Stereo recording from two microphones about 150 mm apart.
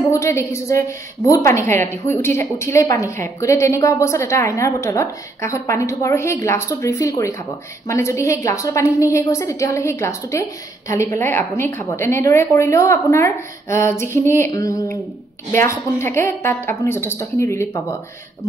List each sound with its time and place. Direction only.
0.1 s a woman's voice: 20° left (ahead or behind)